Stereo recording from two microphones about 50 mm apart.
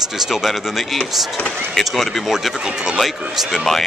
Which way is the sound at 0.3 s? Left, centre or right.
Centre.